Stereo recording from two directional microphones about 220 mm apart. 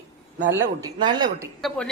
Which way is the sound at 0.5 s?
15° right (ahead or behind).